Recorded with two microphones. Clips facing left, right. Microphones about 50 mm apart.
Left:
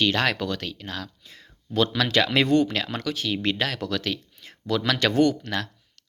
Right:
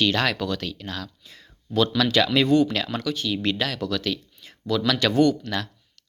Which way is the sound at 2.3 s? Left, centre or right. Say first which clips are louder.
Right 1 dB; left.